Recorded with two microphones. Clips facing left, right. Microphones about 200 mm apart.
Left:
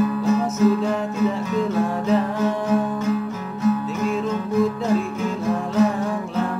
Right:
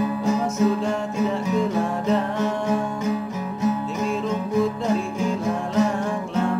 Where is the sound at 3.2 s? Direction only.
15° right (ahead or behind).